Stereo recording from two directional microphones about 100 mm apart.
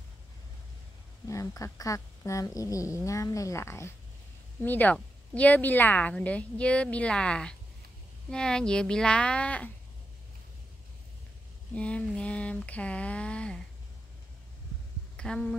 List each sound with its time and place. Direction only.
1.2 s speech: 30° left (ahead or behind)
4.6 s speech: 15° left (ahead or behind)
11.7 s speech: 10° left (ahead or behind)
15.1 s speech: 5° left (ahead or behind)